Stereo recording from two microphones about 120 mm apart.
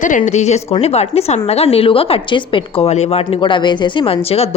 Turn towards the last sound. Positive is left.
turn(degrees=55)  # may be behind; listen again after turning